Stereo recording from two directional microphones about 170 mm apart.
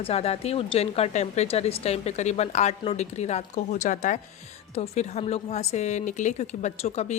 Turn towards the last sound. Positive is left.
turn(degrees=40)  # may be behind; listen again after turning